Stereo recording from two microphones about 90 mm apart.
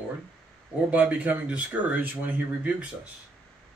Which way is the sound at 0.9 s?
15° right (ahead or behind).